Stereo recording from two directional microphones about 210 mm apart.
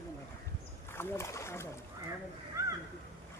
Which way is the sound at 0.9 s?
10° left (ahead or behind).